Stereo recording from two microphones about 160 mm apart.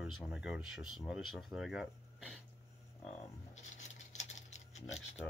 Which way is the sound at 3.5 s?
45° left (ahead or behind).